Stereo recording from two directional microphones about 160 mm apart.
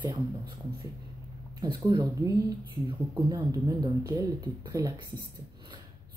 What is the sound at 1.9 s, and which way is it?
Speech, 20° right (ahead or behind).